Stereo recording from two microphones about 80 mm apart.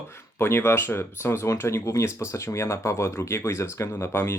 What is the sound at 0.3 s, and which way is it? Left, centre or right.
Speech, left.